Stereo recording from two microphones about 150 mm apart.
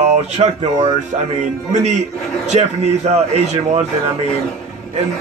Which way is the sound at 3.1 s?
45° right (ahead or behind).